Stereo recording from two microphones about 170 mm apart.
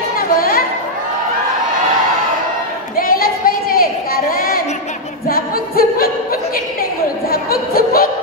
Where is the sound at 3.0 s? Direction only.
60° left (ahead or behind).